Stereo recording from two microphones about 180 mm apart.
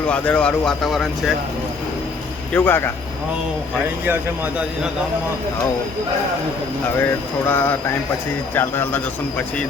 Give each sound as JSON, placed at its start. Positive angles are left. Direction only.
{"t": 0.1, "sound": "speech", "side_deg": 5}
{"t": 2.5, "sound": "speech", "side_deg": 10}
{"t": 4.0, "sound": "speech", "side_deg": -10}
{"t": 7.0, "sound": "speech", "side_deg": 10}